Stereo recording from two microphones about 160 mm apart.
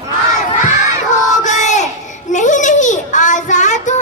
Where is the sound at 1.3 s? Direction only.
50° left (ahead or behind).